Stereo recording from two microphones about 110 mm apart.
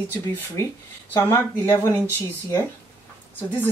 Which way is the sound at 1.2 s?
20° left (ahead or behind).